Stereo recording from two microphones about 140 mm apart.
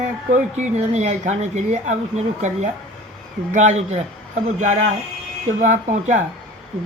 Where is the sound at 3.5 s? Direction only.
55° right (ahead or behind).